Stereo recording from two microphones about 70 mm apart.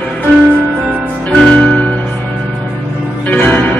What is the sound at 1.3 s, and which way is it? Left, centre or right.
Music, centre.